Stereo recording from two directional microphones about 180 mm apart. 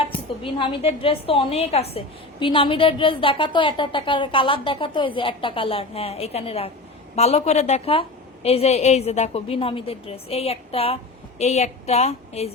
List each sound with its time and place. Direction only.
0.1 s a woman's voice: 30° left (ahead or behind)